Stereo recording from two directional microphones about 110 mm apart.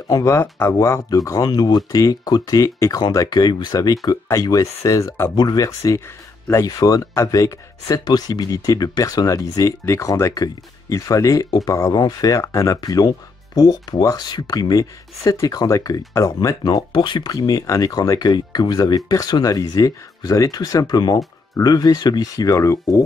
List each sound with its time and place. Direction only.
0.1 s speech: 25° left (ahead or behind)
5.3 s speech: 40° left (ahead or behind)